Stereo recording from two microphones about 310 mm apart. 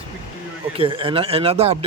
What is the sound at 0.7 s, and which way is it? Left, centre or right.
Speech, centre.